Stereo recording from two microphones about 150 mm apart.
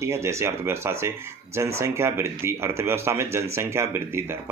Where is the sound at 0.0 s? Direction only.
20° right (ahead or behind).